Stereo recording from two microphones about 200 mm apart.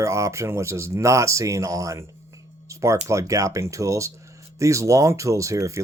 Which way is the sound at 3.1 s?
15° right (ahead or behind).